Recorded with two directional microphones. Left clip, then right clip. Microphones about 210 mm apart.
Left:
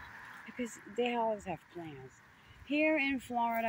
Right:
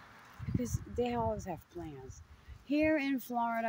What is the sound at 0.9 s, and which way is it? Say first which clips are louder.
Speech: left 1 dB; 10° right (ahead or behind).